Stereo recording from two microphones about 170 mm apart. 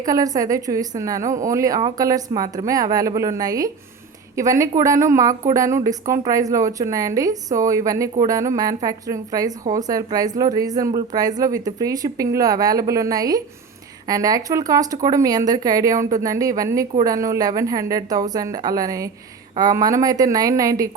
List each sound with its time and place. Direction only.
0.0 s a woman's voice: 20° right (ahead or behind)